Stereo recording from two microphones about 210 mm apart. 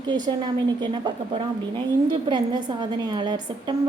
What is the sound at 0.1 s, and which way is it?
A woman's voice, 20° right (ahead or behind).